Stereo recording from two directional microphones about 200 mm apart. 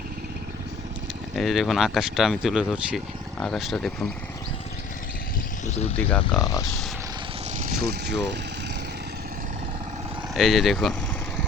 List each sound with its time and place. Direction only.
1.4 s speech: centre (ahead or behind)
6.0 s speech: 10° left (ahead or behind)
7.8 s speech: 55° right (ahead or behind)
10.3 s speech: centre (ahead or behind)